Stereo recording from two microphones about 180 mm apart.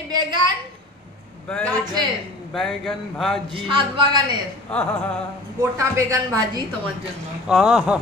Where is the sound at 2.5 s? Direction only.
Centre (ahead or behind).